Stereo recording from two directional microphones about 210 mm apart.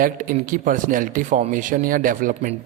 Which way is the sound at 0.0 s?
40° right (ahead or behind).